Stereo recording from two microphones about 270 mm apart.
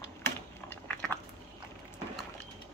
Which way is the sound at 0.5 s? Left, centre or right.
Centre.